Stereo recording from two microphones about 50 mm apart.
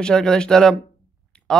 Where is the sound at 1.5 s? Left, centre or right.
Centre.